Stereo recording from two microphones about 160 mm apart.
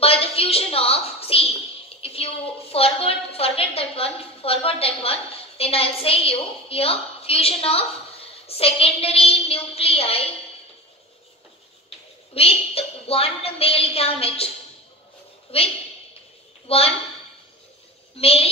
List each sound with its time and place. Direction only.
0.0 s a sound: 35° left (ahead or behind)
12.4 s a woman's voice: 35° left (ahead or behind)
15.5 s a woman's voice: 35° left (ahead or behind)
18.1 s a woman's voice: 35° left (ahead or behind)